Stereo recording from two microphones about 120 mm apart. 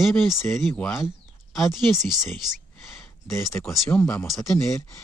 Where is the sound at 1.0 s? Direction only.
Centre (ahead or behind).